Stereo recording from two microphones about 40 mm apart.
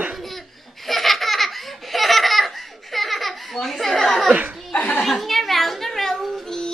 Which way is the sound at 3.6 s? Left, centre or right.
Centre.